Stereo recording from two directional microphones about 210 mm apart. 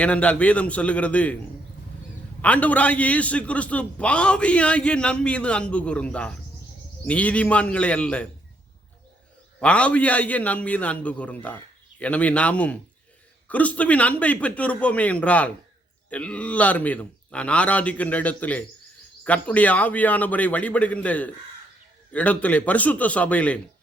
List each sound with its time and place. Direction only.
0.0 s speech: 5° left (ahead or behind)
2.4 s a man's voice: 5° left (ahead or behind)
9.6 s speech: 5° left (ahead or behind)